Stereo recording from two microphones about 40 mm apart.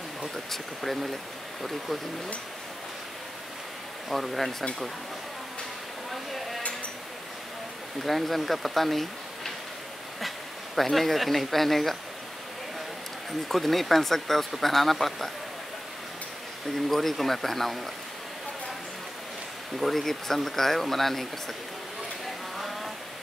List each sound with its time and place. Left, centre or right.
0.5 s speech: centre
4.1 s speech: centre
8.0 s speech: centre
10.8 s speech: centre
13.5 s speech: centre
16.7 s speech: centre
19.8 s speech: centre
22.6 s a sound: centre